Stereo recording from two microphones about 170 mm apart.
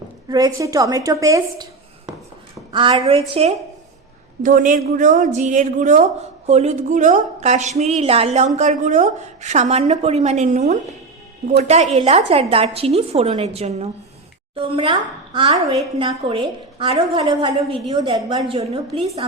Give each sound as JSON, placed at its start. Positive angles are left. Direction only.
{"t": 0.3, "sound": "a woman's voice", "side_deg": -20}
{"t": 2.7, "sound": "a woman's voice", "side_deg": -30}
{"t": 4.4, "sound": "a woman's voice", "side_deg": -50}